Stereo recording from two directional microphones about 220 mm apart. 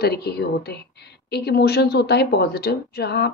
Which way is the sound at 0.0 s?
45° left (ahead or behind).